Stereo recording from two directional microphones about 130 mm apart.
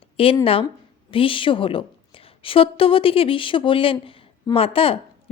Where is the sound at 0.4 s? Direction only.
45° left (ahead or behind).